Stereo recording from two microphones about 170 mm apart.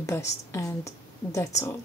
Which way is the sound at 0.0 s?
15° left (ahead or behind).